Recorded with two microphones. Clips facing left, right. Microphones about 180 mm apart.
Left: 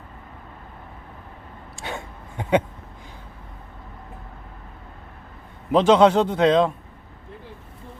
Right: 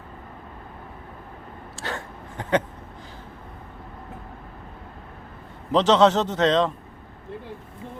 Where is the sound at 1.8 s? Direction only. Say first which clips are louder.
Even; 15° left (ahead or behind).